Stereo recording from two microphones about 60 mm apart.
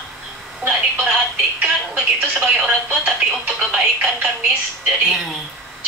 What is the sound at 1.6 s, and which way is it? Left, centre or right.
Speech, right.